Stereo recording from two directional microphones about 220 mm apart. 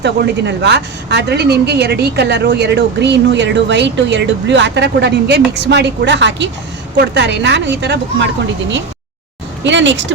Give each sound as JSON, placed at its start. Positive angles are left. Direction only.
{"t": 0.0, "sound": "a woman's voice", "side_deg": -50}
{"t": 9.6, "sound": "speech", "side_deg": -55}